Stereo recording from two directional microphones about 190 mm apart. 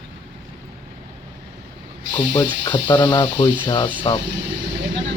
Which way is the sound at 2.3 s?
25° left (ahead or behind).